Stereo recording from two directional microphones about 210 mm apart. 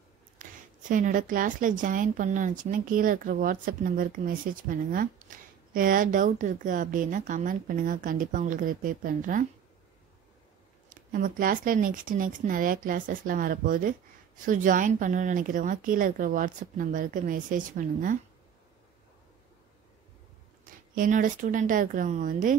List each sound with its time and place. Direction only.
0.4 s speech: 40° right (ahead or behind)
10.9 s speech: 40° right (ahead or behind)
20.9 s speech: 40° right (ahead or behind)